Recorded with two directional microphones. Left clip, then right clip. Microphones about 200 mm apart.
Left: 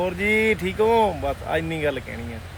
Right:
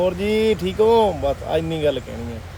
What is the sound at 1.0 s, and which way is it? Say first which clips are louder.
Speech: right 3 dB; 15° left (ahead or behind).